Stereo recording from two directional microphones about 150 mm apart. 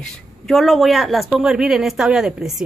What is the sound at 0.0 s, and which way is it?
Speech, centre (ahead or behind).